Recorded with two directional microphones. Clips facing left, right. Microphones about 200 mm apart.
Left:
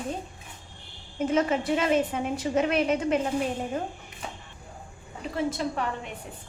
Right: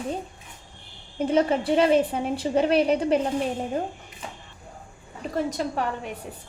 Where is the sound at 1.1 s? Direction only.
30° right (ahead or behind).